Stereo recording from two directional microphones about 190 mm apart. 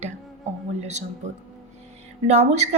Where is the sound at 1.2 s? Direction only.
40° right (ahead or behind).